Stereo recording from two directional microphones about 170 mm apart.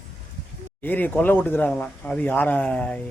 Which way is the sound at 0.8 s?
10° left (ahead or behind).